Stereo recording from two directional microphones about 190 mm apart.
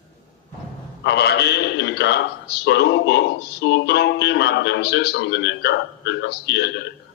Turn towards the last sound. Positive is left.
turn(degrees=60)  # may be behind; listen again after turning